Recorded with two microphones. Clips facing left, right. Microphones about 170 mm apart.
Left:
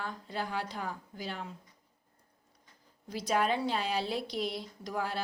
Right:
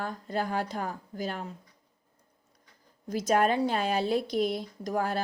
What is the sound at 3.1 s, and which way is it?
A woman's voice, 45° right (ahead or behind).